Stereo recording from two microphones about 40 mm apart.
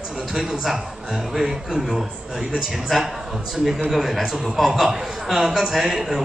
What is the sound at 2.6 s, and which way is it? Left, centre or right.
A man's voice, centre.